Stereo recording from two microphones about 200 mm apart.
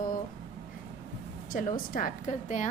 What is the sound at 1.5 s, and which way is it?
A woman's voice, 45° left (ahead or behind).